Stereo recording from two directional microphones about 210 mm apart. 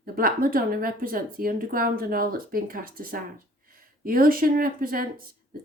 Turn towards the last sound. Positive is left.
turn(degrees=-45)  # may be behind; listen again after turning